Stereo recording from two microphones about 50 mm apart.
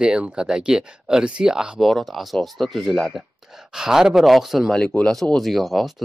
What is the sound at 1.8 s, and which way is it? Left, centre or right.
Speech, centre.